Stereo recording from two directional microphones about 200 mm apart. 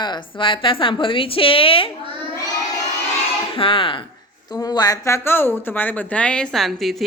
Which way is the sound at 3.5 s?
25° left (ahead or behind).